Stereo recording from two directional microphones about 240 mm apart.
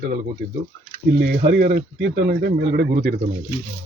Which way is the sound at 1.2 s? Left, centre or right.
Right.